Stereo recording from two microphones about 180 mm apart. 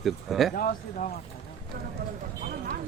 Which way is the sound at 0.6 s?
45° left (ahead or behind).